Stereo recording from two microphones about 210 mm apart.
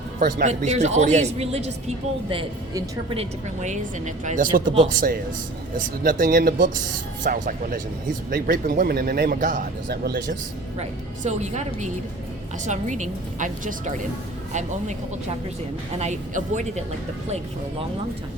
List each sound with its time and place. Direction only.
0.2 s a woman's voice: 40° right (ahead or behind); by 3.2 s 20° right (ahead or behind)
3.2 s a woman's voice: 35° right (ahead or behind)
10.8 s a woman's voice: 35° right (ahead or behind)
16.0 s a woman's voice: 35° right (ahead or behind)